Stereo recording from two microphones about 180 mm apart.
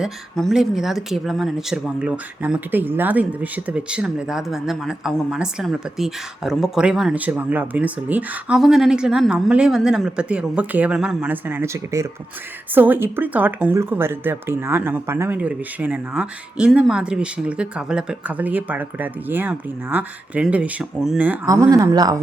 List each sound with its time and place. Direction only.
0.0 s speech: centre (ahead or behind)
21.4 s speech: 20° right (ahead or behind)